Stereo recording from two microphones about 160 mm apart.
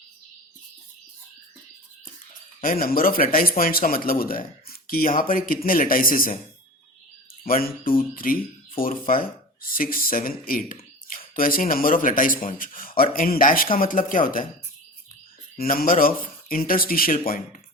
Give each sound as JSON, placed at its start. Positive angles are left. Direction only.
{"t": 2.6, "sound": "speech", "side_deg": 65}
{"t": 7.4, "sound": "speech", "side_deg": 60}
{"t": 15.5, "sound": "speech", "side_deg": 65}